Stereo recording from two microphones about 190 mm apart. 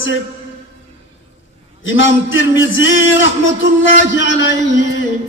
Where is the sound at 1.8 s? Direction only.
90° left.